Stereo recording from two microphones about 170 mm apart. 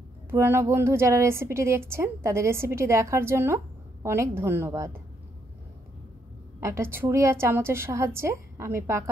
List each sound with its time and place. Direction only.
0.3 s a woman's voice: 15° right (ahead or behind)
6.6 s a woman's voice: 15° right (ahead or behind)